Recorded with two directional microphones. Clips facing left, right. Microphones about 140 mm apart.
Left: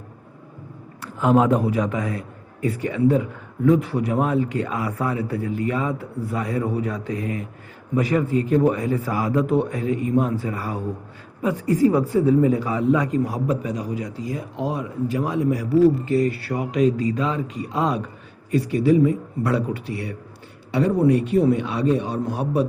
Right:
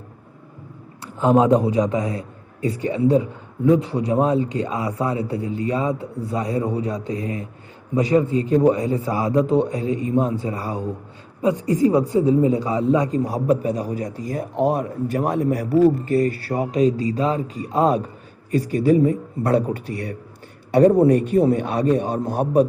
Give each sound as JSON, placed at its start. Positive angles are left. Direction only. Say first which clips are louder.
{"t": 1.0, "sound": "a man's voice", "louder": "right 2 dB", "side_deg": -25}